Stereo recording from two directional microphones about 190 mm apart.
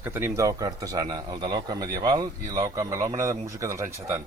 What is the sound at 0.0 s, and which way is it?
A man's voice, 10° right (ahead or behind).